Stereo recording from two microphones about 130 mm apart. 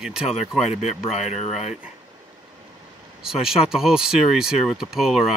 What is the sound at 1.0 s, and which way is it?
Speech, 55° left (ahead or behind).